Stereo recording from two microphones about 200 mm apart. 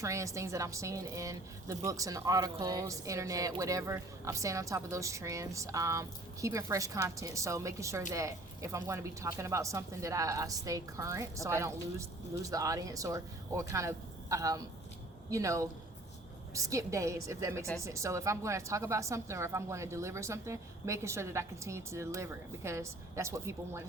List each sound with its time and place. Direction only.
0.0 s a woman's voice: 15° right (ahead or behind)